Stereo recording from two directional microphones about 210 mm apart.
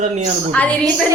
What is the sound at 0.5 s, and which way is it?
Speech, 5° left (ahead or behind).